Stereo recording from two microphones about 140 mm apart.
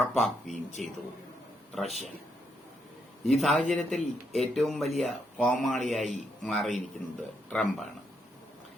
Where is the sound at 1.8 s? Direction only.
55° left (ahead or behind).